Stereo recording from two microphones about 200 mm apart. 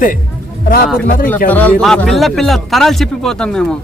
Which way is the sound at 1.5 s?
10° left (ahead or behind).